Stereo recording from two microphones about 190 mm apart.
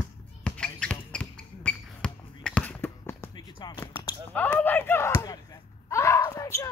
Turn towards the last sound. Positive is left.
turn(degrees=15)  # may be behind; listen again after turning